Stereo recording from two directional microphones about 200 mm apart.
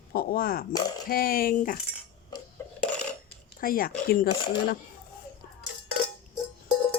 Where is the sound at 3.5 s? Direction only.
45° left (ahead or behind).